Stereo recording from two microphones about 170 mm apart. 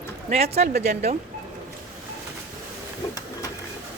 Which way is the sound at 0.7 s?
70° right (ahead or behind).